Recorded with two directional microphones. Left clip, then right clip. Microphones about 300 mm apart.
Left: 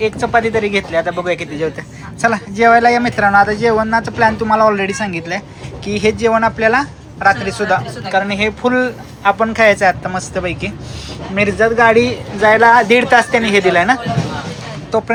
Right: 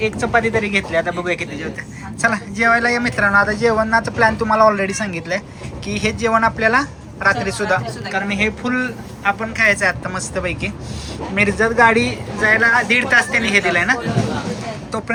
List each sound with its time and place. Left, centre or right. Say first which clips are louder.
0.0 s speech: left 3 dB; centre